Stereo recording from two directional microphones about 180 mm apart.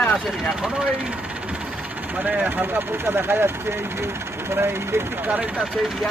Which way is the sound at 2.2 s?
10° right (ahead or behind).